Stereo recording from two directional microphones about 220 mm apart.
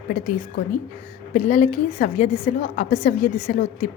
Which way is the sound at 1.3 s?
35° left (ahead or behind).